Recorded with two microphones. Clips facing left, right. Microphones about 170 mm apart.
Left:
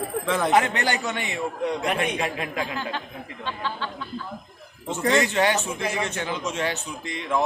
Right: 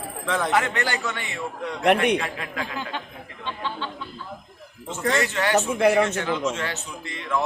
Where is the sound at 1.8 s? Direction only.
70° right (ahead or behind).